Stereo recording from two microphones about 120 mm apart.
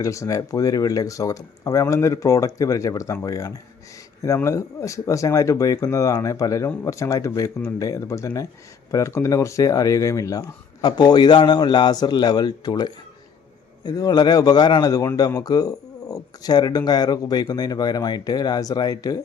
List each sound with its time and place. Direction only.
0.0 s speech: 25° left (ahead or behind)